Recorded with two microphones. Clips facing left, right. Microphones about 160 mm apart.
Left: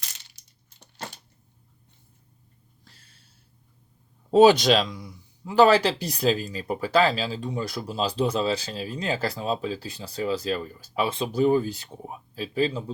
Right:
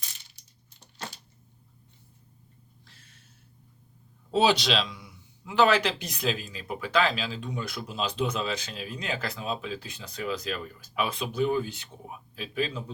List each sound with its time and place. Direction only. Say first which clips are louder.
4.3 s speech: left 8 dB; 45° left (ahead or behind)